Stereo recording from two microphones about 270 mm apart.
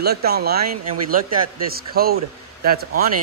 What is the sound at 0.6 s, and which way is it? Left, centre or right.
Speech, right.